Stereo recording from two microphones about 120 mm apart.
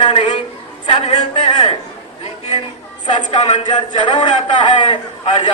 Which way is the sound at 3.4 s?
70° left (ahead or behind).